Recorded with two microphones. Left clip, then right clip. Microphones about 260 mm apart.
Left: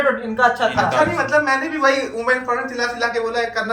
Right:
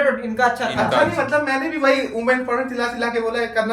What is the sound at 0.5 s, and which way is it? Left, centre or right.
Speech, right.